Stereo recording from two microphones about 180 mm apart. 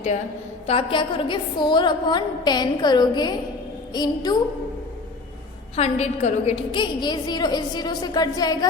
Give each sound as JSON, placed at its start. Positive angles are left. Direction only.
{"t": 0.7, "sound": "a woman's voice", "side_deg": 30}
{"t": 5.7, "sound": "a woman's voice", "side_deg": 35}